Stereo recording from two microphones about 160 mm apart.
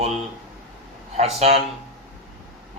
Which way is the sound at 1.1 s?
40° right (ahead or behind).